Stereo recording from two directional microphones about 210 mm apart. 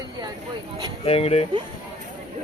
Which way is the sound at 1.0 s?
30° left (ahead or behind).